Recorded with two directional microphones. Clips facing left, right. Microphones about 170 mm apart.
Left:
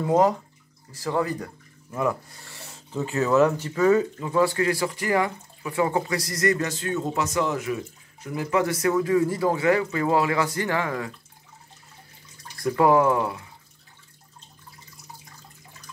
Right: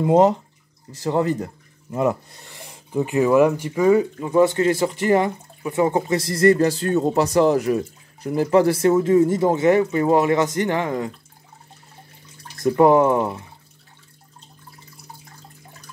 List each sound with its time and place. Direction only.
0.0 s speech: 25° right (ahead or behind)
12.5 s speech: 25° right (ahead or behind)